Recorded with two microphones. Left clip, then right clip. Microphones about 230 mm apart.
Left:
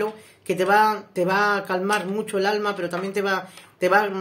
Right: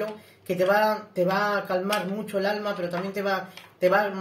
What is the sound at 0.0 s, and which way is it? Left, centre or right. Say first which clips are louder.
Speech: left 5 dB; left.